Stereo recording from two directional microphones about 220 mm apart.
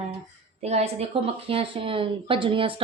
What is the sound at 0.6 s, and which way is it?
Speech, 30° right (ahead or behind).